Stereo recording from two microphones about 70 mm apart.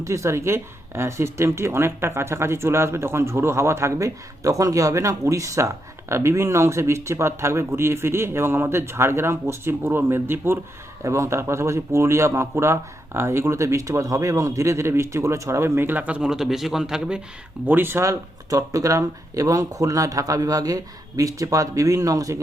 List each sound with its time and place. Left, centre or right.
0.0 s speech: right
11.0 s speech: right; by 16.3 s centre
16.3 s a man's voice: centre
17.7 s speech: right
18.0 s speech: right